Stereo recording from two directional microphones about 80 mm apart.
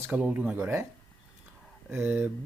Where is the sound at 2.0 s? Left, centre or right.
Right.